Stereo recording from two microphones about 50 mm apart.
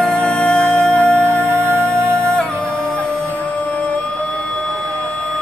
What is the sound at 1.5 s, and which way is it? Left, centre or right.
Music, right.